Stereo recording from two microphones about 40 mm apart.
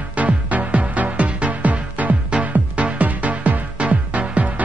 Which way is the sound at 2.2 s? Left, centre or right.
Right.